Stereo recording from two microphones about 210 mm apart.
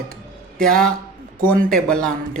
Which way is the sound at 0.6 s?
5° left (ahead or behind).